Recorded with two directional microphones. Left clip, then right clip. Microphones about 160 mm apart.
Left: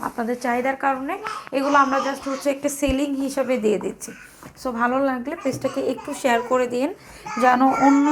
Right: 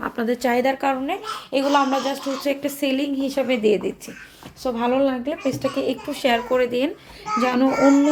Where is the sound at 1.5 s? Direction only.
30° left (ahead or behind).